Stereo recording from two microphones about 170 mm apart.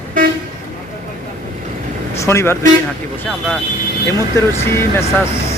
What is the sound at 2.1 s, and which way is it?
Speech, 15° left (ahead or behind).